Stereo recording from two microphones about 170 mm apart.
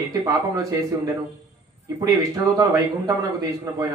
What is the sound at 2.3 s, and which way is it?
Speech, 20° right (ahead or behind).